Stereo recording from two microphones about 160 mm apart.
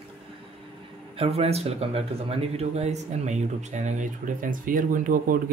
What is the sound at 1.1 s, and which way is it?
Speech, 35° right (ahead or behind).